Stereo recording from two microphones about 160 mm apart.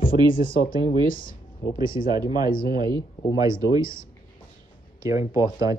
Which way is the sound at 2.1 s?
25° right (ahead or behind).